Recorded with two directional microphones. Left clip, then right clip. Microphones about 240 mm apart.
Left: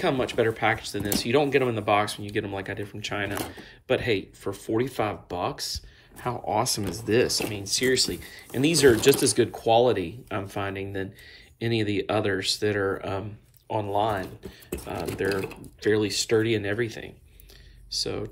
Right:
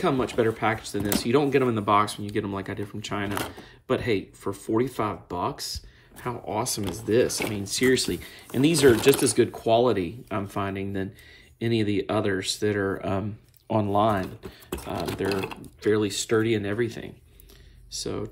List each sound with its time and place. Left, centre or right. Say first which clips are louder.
0.2 s speech: even; centre
6.8 s speech: right 1 dB; centre